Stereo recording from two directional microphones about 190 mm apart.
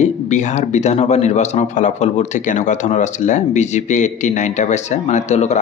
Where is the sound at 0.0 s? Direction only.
40° left (ahead or behind).